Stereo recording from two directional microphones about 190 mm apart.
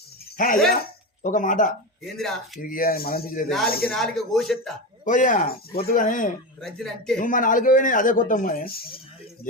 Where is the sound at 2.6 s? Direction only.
45° left (ahead or behind).